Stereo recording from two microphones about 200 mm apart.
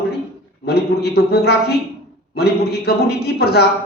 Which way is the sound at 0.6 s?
55° left (ahead or behind).